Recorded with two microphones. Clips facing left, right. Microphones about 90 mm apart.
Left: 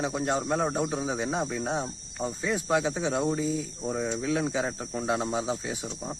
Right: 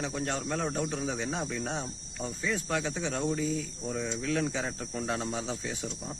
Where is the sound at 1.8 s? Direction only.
25° left (ahead or behind).